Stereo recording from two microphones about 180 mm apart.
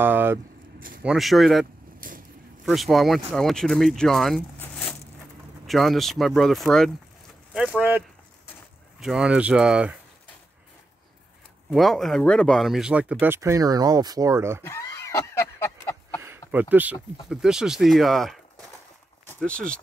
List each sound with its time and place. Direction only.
0.0 s vehicle: 10° right (ahead or behind)
0.7 s a sound: 55° right (ahead or behind)
1.0 s speech: centre (ahead or behind)
2.0 s vehicle: 50° right (ahead or behind)
2.6 s speech: centre (ahead or behind)
5.7 s speech: centre (ahead or behind)
9.0 s speech: 5° right (ahead or behind)
11.7 s speech: centre (ahead or behind); by 14.6 s 15° right (ahead or behind)
14.6 s a sound: 15° left (ahead or behind)
16.2 s a sound: 10° right (ahead or behind)
17.3 s speech: 5° right (ahead or behind)